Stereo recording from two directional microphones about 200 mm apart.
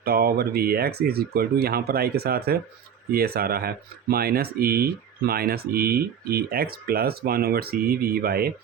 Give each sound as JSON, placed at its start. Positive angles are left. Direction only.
{"t": 0.0, "sound": "speech", "side_deg": -50}